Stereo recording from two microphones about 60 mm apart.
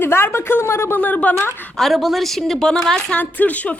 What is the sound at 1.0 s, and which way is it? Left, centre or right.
Speech, left.